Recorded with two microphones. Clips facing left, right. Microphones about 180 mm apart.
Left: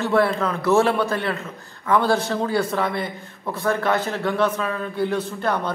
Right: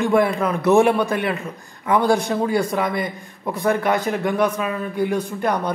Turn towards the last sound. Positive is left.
turn(degrees=-15)  # may be behind; listen again after turning